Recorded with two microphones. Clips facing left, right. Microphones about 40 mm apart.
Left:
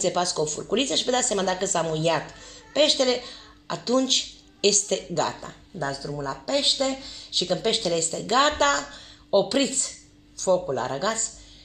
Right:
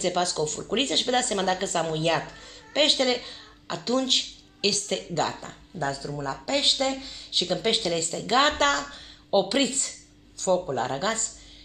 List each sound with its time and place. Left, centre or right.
0.0 s a woman's voice: right